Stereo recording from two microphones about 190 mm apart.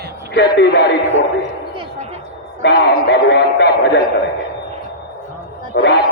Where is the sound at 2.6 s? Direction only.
65° left (ahead or behind).